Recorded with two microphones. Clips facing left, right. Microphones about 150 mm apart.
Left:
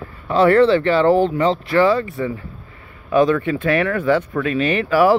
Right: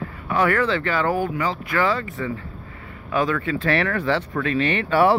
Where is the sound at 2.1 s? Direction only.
20° left (ahead or behind).